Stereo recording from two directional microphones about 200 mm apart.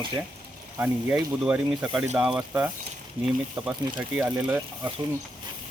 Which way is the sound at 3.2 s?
30° right (ahead or behind).